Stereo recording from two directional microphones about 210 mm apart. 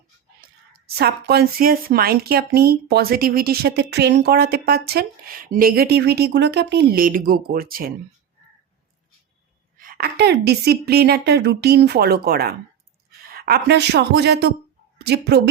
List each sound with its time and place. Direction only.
0.4 s a sound: 45° right (ahead or behind)
0.9 s speech: 50° right (ahead or behind)
9.7 s a woman's voice: 40° right (ahead or behind)